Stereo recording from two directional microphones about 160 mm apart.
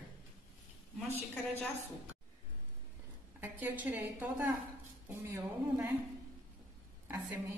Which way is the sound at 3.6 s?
15° right (ahead or behind).